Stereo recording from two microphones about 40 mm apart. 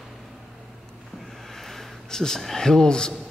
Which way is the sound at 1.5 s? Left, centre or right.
Centre.